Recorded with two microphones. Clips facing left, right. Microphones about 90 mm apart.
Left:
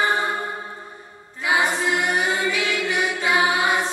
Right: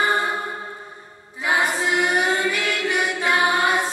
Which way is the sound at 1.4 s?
Centre (ahead or behind).